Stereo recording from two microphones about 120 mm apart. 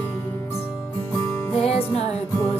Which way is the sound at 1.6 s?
60° left (ahead or behind).